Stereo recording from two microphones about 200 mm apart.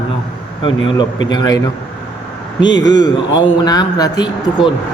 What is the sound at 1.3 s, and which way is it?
Speech, 20° left (ahead or behind).